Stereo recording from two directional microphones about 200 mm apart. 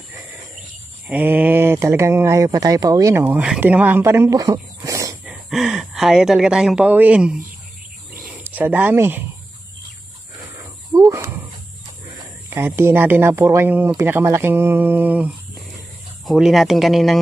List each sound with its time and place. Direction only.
1.0 s speech: 10° right (ahead or behind)
5.5 s speech: centre (ahead or behind)
8.5 s speech: 10° right (ahead or behind)
10.9 s speech: 15° right (ahead or behind)
12.4 s speech: 10° right (ahead or behind)